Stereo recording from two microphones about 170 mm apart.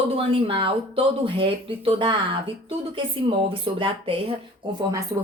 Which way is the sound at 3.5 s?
30° right (ahead or behind).